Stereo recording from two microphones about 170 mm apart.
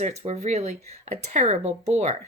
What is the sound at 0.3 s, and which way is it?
A woman's voice, 40° right (ahead or behind).